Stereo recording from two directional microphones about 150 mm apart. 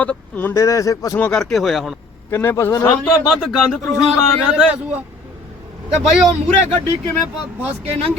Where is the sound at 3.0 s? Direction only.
Centre (ahead or behind).